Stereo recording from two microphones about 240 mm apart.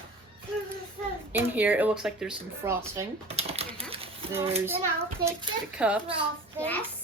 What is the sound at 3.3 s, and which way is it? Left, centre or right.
Typing, right.